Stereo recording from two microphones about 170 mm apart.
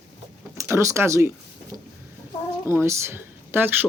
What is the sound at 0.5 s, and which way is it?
Speech, 15° right (ahead or behind).